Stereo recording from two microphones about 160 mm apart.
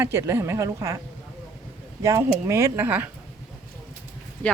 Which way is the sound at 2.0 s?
20° right (ahead or behind).